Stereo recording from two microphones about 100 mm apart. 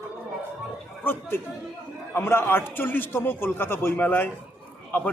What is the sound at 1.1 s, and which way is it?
A man's voice, 25° left (ahead or behind).